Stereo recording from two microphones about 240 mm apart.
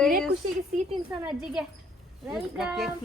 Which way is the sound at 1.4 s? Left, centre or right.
Centre.